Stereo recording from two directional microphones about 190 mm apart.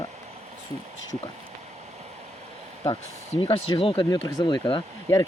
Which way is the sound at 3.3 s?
30° left (ahead or behind).